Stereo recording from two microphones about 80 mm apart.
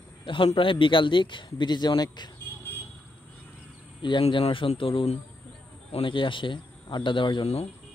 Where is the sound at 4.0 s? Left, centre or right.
Left.